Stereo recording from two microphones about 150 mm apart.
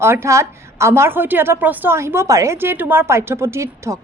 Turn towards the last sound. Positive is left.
turn(degrees=-20)  # may be behind; listen again after turning